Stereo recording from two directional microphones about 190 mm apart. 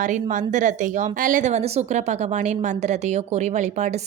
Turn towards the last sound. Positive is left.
turn(degrees=-40)  # may be behind; listen again after turning